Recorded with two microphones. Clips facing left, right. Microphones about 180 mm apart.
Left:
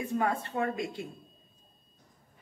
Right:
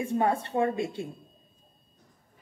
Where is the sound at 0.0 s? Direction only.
25° right (ahead or behind).